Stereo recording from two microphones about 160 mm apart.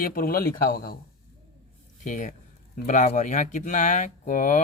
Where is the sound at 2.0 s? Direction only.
55° left (ahead or behind).